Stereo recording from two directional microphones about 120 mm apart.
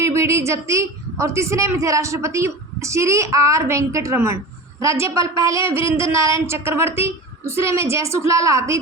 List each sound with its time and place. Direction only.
0.0 s a woman's voice: 25° right (ahead or behind)